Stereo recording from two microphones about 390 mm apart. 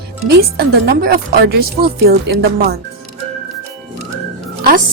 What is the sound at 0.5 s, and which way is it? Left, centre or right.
A woman's voice, right.